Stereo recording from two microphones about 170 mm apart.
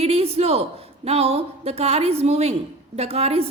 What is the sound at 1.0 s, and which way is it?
A woman's voice, 35° right (ahead or behind).